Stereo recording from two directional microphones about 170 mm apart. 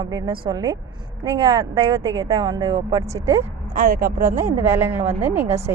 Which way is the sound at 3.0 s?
15° right (ahead or behind).